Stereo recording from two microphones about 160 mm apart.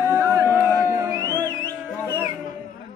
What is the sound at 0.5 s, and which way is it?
Music, 15° right (ahead or behind).